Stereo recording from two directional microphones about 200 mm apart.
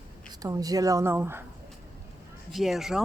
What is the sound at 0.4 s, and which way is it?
Speech, 20° right (ahead or behind).